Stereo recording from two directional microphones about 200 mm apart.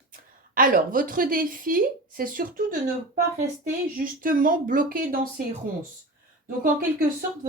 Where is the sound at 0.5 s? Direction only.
45° right (ahead or behind).